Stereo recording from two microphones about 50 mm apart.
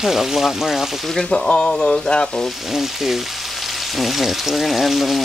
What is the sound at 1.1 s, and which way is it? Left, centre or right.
Frying, centre.